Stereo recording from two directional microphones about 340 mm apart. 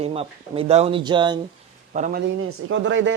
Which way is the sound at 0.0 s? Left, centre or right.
Centre.